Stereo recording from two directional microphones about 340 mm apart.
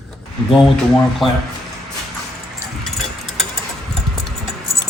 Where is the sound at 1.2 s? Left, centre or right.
Centre.